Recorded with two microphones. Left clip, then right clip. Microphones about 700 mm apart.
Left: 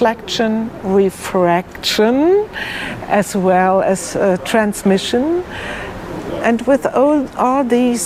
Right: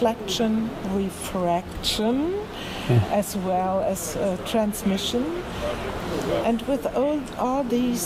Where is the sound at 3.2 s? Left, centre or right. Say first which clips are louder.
Left 15 dB; left.